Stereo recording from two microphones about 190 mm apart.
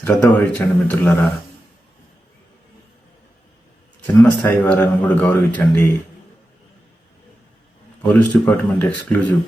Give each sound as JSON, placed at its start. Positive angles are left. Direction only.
{"t": 0.0, "sound": "a man's voice", "side_deg": 10}
{"t": 4.0, "sound": "a man's voice", "side_deg": 10}
{"t": 8.0, "sound": "a man's voice", "side_deg": 5}